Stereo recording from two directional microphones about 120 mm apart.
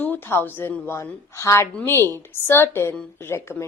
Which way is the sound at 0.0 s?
15° left (ahead or behind).